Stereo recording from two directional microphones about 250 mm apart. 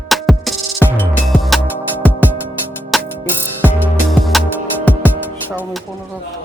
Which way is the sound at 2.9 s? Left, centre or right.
Centre.